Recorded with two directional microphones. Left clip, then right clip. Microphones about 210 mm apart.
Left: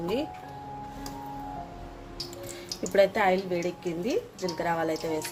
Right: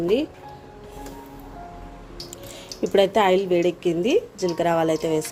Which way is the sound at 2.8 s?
30° right (ahead or behind).